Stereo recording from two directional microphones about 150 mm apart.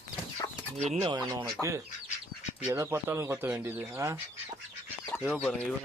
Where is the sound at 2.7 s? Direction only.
15° right (ahead or behind).